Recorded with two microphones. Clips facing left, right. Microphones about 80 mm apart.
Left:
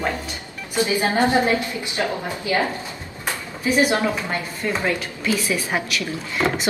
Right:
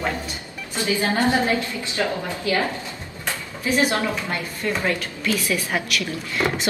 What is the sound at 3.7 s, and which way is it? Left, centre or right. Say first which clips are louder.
A woman's voice: left 2 dB; centre.